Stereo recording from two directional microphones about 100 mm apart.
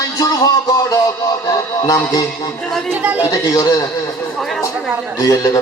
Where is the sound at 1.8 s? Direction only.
40° left (ahead or behind).